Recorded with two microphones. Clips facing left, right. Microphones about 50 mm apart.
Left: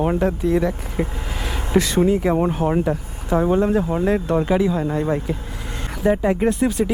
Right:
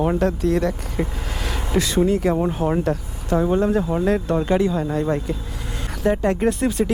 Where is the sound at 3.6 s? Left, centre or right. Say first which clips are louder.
Left 1 dB; left.